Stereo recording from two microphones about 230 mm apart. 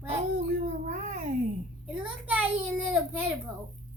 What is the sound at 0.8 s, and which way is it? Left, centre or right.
Speech, right.